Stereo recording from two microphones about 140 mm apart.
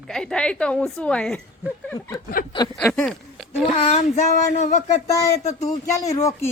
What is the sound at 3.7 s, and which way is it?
Child singing, 50° left (ahead or behind).